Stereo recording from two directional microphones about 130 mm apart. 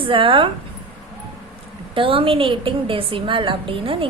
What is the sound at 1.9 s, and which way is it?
A woman's voice, 45° right (ahead or behind).